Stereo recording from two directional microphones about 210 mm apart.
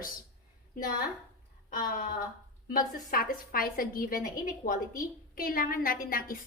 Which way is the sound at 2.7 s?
45° left (ahead or behind).